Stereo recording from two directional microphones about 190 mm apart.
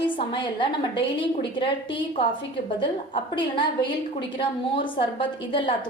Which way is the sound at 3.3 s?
25° left (ahead or behind).